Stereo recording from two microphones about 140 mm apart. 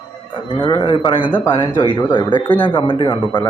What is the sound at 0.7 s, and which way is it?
Speech, 35° left (ahead or behind).